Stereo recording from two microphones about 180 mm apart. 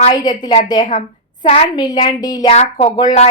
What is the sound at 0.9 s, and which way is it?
Speech, 45° left (ahead or behind).